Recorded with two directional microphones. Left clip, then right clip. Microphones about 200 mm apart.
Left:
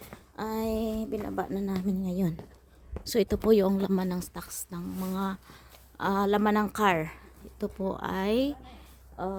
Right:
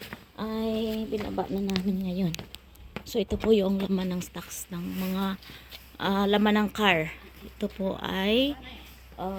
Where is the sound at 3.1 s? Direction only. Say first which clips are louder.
Left 1 dB; 35° left (ahead or behind); by 8.5 s 15° left (ahead or behind).